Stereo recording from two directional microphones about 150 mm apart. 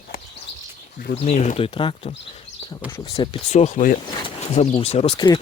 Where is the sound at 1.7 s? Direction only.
35° left (ahead or behind).